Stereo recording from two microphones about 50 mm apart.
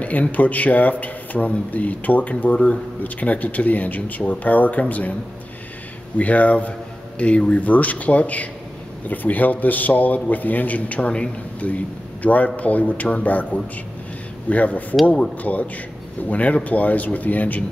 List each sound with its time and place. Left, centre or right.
0.0 s speech: left
6.1 s speech: left